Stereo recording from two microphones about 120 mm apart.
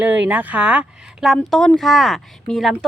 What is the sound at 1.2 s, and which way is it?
Speech, centre (ahead or behind).